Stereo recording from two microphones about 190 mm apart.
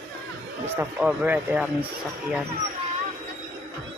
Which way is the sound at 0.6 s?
10° right (ahead or behind).